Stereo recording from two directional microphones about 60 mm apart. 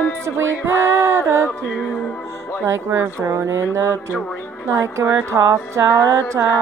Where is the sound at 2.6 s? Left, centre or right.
Right.